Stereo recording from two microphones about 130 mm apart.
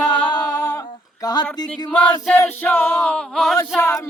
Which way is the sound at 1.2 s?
30° left (ahead or behind).